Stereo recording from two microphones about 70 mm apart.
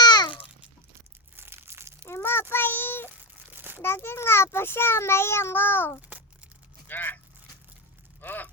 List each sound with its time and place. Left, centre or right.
0.0 s babbling: left
1.4 s crumpling: right
2.0 s child singing: left
3.5 s crumpling: right
3.8 s a child's voice: left
6.8 s vehicle: left
8.2 s a sound: left